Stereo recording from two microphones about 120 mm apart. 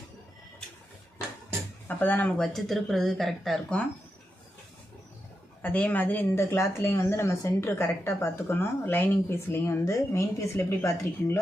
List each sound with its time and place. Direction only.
1.9 s speech: 15° left (ahead or behind)
2.4 s speech: centre (ahead or behind)
5.6 s speech: 15° left (ahead or behind)